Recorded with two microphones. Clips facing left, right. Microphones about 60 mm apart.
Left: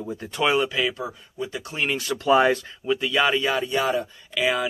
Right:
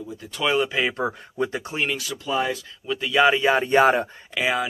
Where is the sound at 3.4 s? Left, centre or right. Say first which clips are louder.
Right 4 dB; right.